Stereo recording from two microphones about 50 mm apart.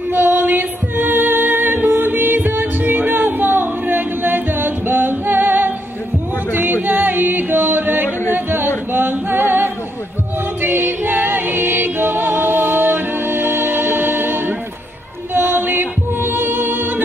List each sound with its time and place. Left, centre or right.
0.1 s music: right
8.3 s singing: right
10.6 s music: right